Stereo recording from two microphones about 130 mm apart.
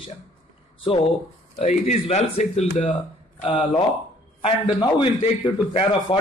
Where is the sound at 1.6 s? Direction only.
55° left (ahead or behind).